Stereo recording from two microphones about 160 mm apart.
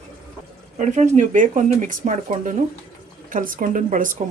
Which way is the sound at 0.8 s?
45° right (ahead or behind).